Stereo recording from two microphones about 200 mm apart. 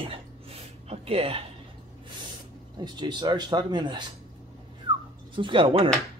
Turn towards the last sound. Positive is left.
turn(degrees=-25)  # may be behind; listen again after turning